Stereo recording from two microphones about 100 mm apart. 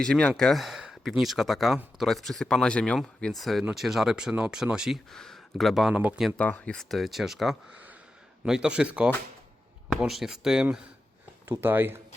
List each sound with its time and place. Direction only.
0.0 s speech: 10° left (ahead or behind); by 4.9 s 5° right (ahead or behind)
5.1 s speech: 5° left (ahead or behind)
6.3 s speech: 10° left (ahead or behind); by 9.1 s 15° right (ahead or behind)
9.9 s speech: centre (ahead or behind)
11.4 s speech: 25° right (ahead or behind)